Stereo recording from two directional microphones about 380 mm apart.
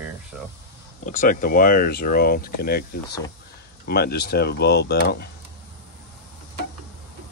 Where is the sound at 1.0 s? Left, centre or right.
Centre.